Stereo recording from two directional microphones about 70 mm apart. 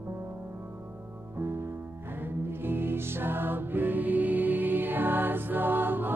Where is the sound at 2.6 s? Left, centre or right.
Right.